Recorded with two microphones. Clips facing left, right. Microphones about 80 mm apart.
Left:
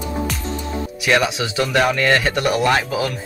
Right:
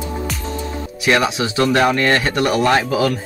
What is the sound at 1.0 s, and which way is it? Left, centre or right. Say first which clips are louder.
Speech: right 2 dB; right.